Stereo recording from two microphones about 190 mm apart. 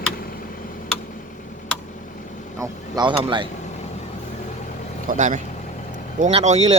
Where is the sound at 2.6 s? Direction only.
20° right (ahead or behind).